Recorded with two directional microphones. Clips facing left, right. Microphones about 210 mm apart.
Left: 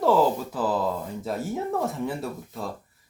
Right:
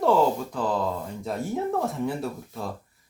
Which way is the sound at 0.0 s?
Centre (ahead or behind).